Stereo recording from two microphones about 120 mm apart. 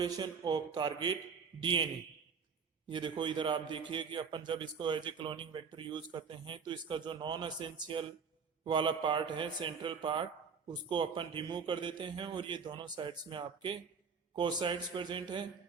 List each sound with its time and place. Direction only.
0.0 s a man's voice: 35° right (ahead or behind)
2.9 s a man's voice: 40° right (ahead or behind)